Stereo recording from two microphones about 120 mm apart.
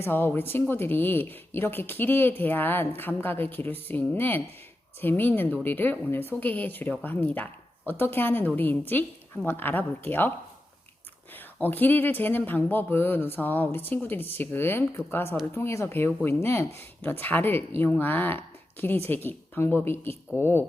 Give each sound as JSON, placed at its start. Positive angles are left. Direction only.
{"t": 0.0, "sound": "a woman's voice", "side_deg": 15}
{"t": 11.3, "sound": "a woman's voice", "side_deg": 15}